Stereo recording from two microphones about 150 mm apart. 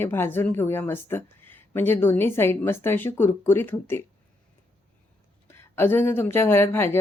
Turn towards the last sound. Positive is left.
turn(degrees=15)  # may be behind; listen again after turning